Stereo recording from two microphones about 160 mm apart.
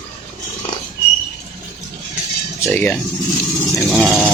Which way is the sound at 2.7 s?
10° left (ahead or behind).